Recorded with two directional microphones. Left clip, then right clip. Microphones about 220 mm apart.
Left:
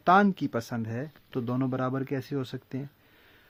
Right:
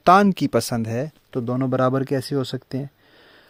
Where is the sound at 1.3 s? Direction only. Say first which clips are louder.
Right 7 dB; 20° right (ahead or behind).